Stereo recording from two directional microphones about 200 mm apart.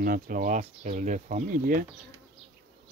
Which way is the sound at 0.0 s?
45° right (ahead or behind).